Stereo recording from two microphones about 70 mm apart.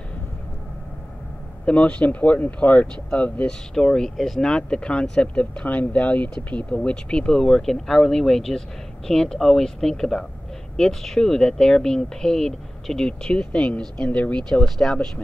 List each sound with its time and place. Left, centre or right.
1.7 s speech: centre